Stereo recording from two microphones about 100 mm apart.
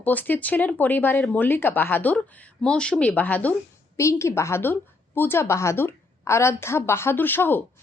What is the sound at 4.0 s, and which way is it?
Speech, 30° left (ahead or behind).